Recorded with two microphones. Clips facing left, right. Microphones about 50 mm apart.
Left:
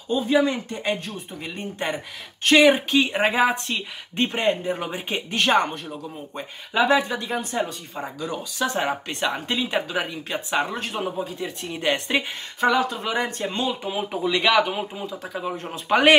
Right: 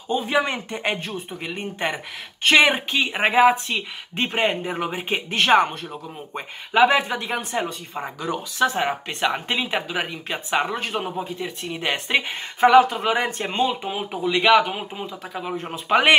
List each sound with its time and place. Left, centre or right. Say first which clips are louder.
0.1 s speech: left 1 dB; right
1.4 s speech: right 2 dB; right
4.4 s speech: right 1 dB; right
4.7 s speech: right 3 dB; centre
6.3 s speech: right 3 dB; right; by 9.3 s centre
9.3 s speech: right 1 dB; right; by 11.8 s centre
12.2 s speech: right 5 dB; right
13.9 s speech: even; centre